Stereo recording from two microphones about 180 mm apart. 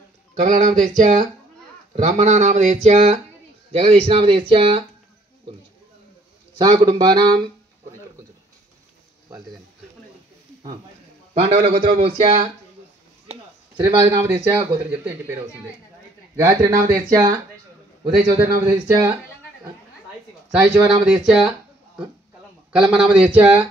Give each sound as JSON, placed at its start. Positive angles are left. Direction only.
{"t": 0.3, "sound": "speech", "side_deg": -45}
{"t": 6.6, "sound": "speech", "side_deg": -25}
{"t": 11.4, "sound": "speech", "side_deg": -30}
{"t": 12.2, "sound": "speech", "side_deg": -40}
{"t": 13.3, "sound": "a sound", "side_deg": -25}
{"t": 14.5, "sound": "speech", "side_deg": -10}
{"t": 20.5, "sound": "speech", "side_deg": -5}
{"t": 22.8, "sound": "speech", "side_deg": -5}